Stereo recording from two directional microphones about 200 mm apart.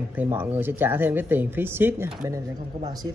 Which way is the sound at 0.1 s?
10° right (ahead or behind).